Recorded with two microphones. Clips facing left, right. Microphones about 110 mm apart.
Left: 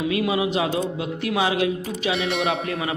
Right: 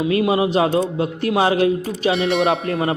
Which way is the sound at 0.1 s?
35° right (ahead or behind).